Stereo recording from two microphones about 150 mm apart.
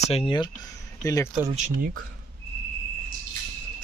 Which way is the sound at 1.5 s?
55° right (ahead or behind).